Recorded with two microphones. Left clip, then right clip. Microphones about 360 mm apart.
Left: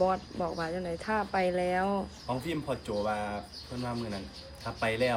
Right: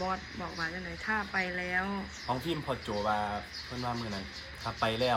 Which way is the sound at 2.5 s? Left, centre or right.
Centre.